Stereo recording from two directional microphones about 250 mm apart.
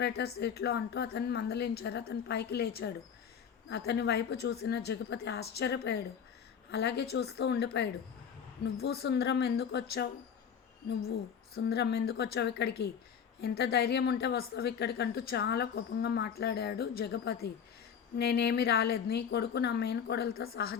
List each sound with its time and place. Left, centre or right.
0.0 s a woman's voice: left
11.5 s a woman's voice: left